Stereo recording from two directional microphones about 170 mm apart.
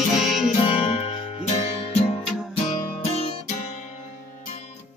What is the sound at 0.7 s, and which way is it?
Music, 35° left (ahead or behind).